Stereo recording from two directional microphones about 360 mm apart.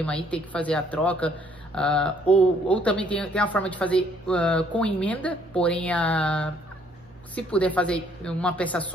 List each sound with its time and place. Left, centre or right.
0.0 s speech: centre